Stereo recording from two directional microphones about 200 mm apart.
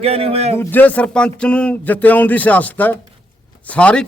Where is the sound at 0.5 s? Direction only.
10° left (ahead or behind).